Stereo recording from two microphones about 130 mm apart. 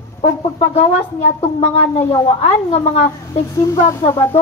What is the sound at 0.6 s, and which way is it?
Speech, 60° left (ahead or behind).